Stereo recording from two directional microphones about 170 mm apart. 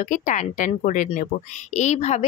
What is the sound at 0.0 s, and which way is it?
A woman's voice, 50° left (ahead or behind).